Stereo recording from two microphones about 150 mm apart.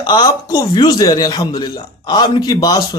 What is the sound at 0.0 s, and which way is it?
Speech, 25° left (ahead or behind).